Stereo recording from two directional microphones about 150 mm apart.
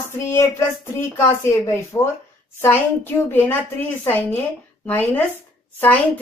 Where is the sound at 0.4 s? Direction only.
15° left (ahead or behind).